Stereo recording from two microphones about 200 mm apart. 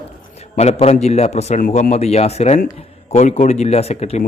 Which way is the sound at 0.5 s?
30° left (ahead or behind).